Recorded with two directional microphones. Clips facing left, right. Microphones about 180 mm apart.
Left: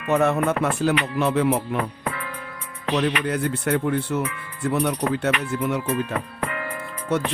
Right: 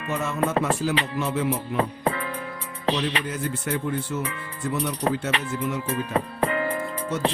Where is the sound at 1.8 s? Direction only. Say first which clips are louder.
Right 4 dB; 30° right (ahead or behind).